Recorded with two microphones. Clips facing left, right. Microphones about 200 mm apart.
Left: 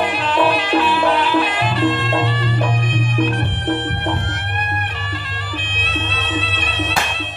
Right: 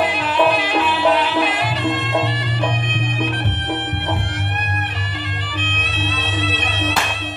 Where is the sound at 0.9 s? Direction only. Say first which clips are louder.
Left 1 dB; 20° right (ahead or behind).